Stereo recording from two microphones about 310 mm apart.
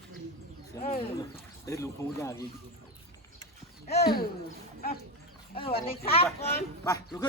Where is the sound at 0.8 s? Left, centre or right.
Centre.